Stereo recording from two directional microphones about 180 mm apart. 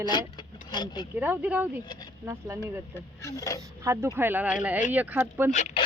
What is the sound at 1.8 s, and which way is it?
Speech, 25° left (ahead or behind).